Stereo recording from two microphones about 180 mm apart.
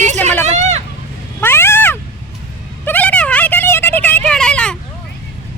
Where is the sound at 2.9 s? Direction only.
10° left (ahead or behind).